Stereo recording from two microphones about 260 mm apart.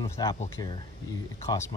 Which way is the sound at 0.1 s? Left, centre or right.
Centre.